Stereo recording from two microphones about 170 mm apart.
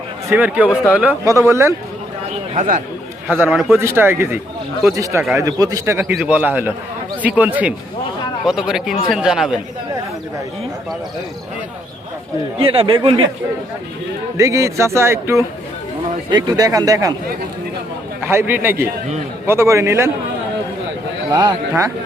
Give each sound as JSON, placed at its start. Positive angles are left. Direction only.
{"t": 0.3, "sound": "speech", "side_deg": -10}
{"t": 2.6, "sound": "speech", "side_deg": -50}
{"t": 3.4, "sound": "speech", "side_deg": 0}
{"t": 3.8, "sound": "speech", "side_deg": -15}
{"t": 12.5, "sound": "speech", "side_deg": -35}
{"t": 14.3, "sound": "speech", "side_deg": -20}
{"t": 18.2, "sound": "speech", "side_deg": -15}
{"t": 21.3, "sound": "speech", "side_deg": -20}